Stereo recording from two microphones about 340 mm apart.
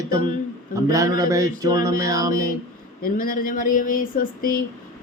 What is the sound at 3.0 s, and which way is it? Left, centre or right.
Speech, left.